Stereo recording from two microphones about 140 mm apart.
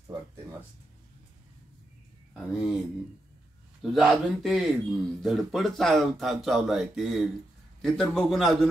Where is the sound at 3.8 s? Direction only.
Centre (ahead or behind).